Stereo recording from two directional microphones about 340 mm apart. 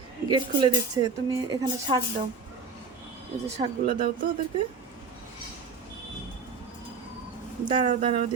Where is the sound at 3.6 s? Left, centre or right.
Right.